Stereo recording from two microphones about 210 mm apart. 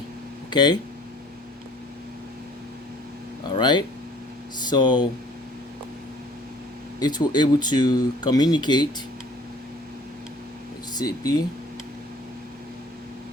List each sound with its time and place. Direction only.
0.5 s speech: 20° left (ahead or behind)
3.5 s speech: 20° left (ahead or behind)
7.0 s speech: 20° left (ahead or behind)
10.9 s speech: 20° left (ahead or behind)